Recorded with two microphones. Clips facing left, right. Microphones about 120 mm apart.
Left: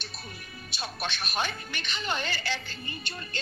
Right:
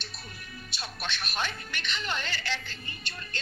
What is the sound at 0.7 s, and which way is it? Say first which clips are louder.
Speech: left 3 dB; 15° left (ahead or behind).